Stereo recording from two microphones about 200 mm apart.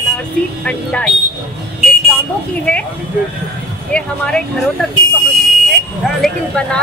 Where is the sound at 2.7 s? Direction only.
5° left (ahead or behind).